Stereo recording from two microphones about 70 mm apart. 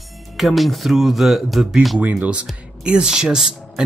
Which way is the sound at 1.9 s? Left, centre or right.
Centre.